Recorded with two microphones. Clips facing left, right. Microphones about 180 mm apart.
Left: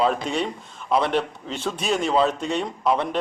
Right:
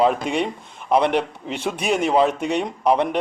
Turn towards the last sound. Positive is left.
turn(degrees=-15)  # may be behind; listen again after turning